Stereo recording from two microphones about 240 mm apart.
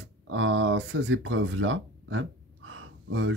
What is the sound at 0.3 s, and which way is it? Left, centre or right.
Speech, right.